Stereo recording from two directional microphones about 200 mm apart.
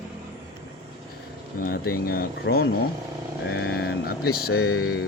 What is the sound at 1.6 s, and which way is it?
Speech, 45° left (ahead or behind).